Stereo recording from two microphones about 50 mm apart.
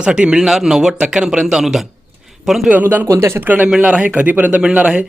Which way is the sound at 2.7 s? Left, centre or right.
Right.